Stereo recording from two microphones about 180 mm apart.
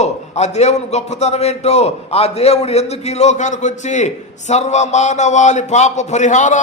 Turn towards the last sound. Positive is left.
turn(degrees=45)  # may be behind; listen again after turning